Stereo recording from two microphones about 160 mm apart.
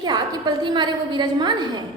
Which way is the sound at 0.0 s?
25° right (ahead or behind).